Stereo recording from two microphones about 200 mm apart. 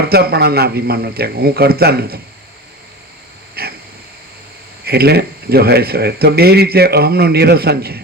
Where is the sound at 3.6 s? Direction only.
50° right (ahead or behind).